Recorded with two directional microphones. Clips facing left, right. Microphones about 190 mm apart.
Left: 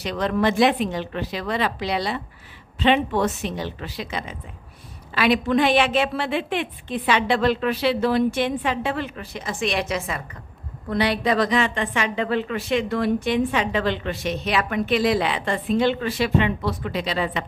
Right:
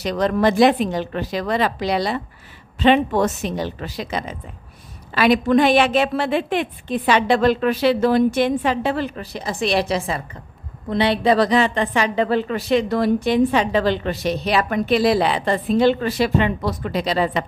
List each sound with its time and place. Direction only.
0.0 s a woman's voice: 40° right (ahead or behind)